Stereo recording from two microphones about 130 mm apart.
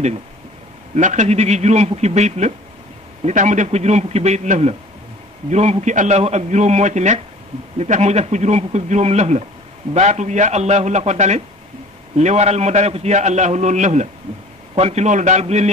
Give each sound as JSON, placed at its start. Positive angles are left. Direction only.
{"t": 0.9, "sound": "a man's voice", "side_deg": -65}
{"t": 14.8, "sound": "a man's voice", "side_deg": -55}